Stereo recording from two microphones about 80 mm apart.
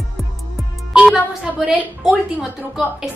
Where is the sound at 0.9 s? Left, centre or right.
Centre.